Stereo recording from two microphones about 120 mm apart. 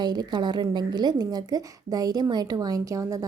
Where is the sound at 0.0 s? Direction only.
35° right (ahead or behind).